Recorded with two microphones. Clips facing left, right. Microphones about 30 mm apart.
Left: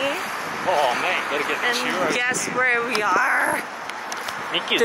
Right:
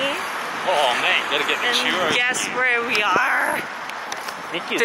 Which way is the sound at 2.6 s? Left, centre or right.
Centre.